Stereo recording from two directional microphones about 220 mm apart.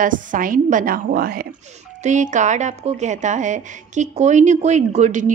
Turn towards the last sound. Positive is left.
turn(degrees=-35)  # may be behind; listen again after turning